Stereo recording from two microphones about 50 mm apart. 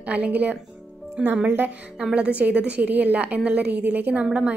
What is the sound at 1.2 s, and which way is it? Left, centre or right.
A woman's voice, centre.